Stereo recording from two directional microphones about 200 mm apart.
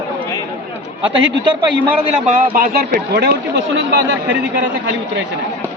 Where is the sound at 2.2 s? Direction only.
40° right (ahead or behind); by 4.0 s 60° right (ahead or behind).